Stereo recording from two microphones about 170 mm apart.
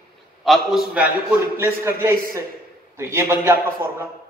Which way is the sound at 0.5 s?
Centre (ahead or behind).